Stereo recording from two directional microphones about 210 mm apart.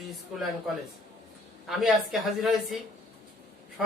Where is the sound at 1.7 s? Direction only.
Centre (ahead or behind).